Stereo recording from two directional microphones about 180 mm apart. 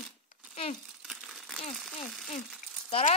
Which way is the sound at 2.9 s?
40° left (ahead or behind).